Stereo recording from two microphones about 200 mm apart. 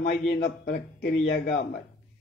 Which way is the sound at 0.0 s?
50° left (ahead or behind).